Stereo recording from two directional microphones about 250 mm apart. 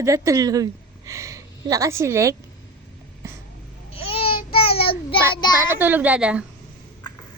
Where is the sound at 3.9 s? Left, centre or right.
Left.